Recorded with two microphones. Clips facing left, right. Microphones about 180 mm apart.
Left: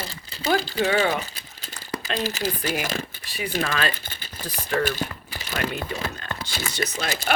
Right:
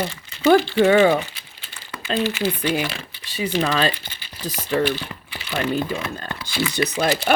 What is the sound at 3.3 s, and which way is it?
Speech, 25° right (ahead or behind).